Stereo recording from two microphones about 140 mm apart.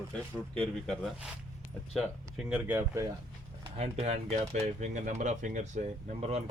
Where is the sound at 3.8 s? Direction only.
50° right (ahead or behind).